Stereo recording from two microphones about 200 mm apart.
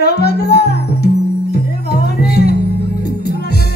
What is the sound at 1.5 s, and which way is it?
Music, 55° left (ahead or behind).